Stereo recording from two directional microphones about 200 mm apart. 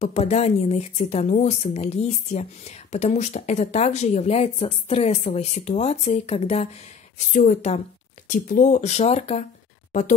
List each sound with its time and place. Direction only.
0.0 s speech: 35° left (ahead or behind)